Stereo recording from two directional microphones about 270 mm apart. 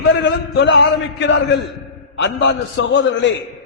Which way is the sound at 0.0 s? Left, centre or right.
Left.